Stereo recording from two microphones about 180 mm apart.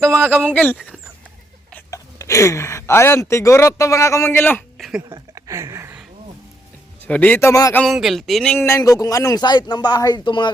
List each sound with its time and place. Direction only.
0.1 s speech: 10° right (ahead or behind)
0.5 s a man's voice: 10° left (ahead or behind)
5.0 s speech: 20° right (ahead or behind)
7.1 s a man's voice: 10° left (ahead or behind)
7.8 s a sound: centre (ahead or behind)
8.5 s a man's voice: 15° left (ahead or behind)